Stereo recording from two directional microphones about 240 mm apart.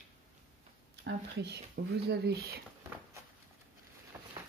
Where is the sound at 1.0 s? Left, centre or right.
Right.